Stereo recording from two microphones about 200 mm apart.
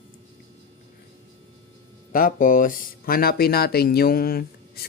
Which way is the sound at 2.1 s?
45° left (ahead or behind).